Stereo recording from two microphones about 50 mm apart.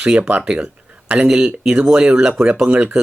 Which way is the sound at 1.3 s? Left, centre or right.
Centre.